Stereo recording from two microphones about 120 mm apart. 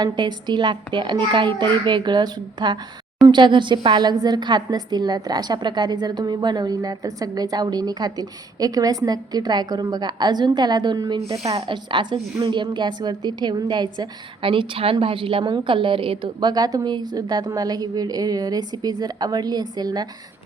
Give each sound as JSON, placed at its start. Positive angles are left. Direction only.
{"t": 0.0, "sound": "a woman's voice", "side_deg": -40}